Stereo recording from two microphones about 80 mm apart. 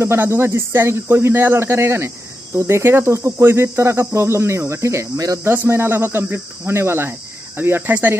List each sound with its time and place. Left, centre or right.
0.0 s speech: right
5.4 s speech: right